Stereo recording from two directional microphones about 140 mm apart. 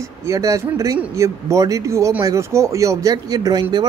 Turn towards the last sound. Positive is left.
turn(degrees=-25)  # may be behind; listen again after turning